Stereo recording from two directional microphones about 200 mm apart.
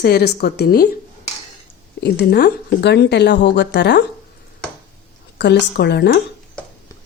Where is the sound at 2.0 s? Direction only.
55° left (ahead or behind).